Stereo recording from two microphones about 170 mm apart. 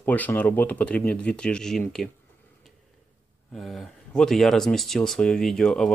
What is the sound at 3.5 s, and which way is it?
Speech, centre (ahead or behind).